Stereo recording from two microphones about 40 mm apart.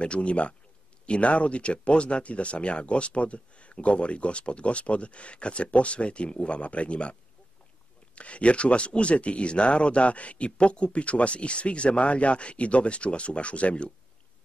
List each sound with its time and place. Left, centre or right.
0.0 s speech: left